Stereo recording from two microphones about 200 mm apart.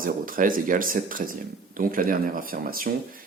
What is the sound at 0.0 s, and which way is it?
Speech, 45° right (ahead or behind).